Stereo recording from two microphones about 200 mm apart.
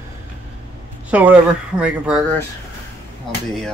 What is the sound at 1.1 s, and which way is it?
Speech, 5° right (ahead or behind).